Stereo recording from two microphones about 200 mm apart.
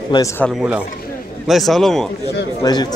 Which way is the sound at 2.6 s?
20° left (ahead or behind).